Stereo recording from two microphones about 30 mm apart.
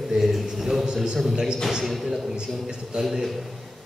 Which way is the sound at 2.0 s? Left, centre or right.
Centre.